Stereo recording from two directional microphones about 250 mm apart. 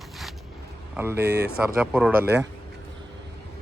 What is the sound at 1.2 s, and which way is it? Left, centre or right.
Speech, right.